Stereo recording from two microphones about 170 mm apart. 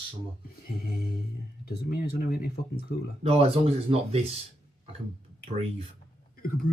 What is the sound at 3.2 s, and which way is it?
Speech, 35° right (ahead or behind).